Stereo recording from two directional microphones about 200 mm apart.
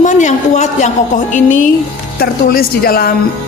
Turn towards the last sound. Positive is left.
turn(degrees=50)  # may be behind; listen again after turning